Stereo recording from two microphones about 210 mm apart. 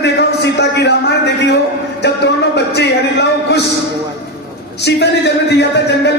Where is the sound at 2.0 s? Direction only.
55° left (ahead or behind).